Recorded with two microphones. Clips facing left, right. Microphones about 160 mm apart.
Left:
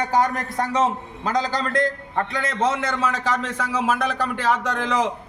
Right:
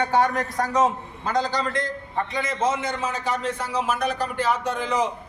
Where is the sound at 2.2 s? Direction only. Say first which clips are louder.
Left 2 dB; 65° left (ahead or behind); by 5.1 s 90° left.